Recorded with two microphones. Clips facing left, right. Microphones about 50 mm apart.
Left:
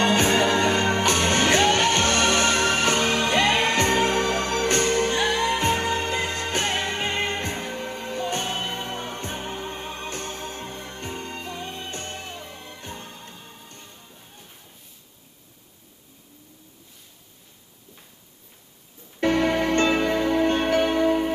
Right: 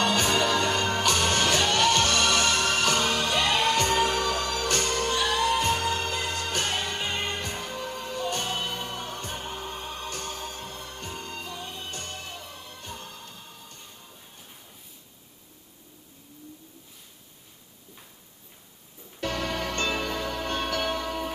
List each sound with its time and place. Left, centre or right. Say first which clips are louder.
0.0 s music: left 4 dB; left
19.1 s music: left 9 dB; left